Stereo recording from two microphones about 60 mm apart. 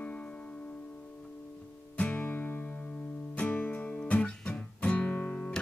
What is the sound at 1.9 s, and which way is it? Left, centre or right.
Music, left.